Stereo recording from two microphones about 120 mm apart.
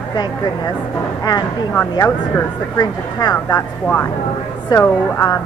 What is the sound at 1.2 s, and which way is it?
A woman's voice, 35° left (ahead or behind).